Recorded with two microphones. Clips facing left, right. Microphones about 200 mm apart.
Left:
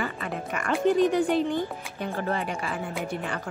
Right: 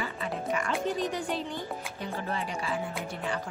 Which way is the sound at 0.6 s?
60° left (ahead or behind).